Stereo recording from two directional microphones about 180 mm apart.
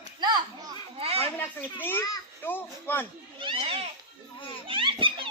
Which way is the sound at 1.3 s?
10° left (ahead or behind).